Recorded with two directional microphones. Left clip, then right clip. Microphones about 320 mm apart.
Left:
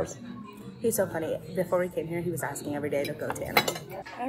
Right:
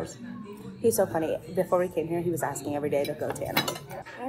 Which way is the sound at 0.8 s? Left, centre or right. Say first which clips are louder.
Right 3 dB; centre.